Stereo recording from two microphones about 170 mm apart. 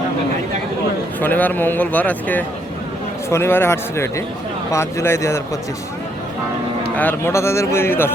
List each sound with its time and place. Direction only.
1.2 s speech: 10° left (ahead or behind)
6.9 s speech: 10° left (ahead or behind)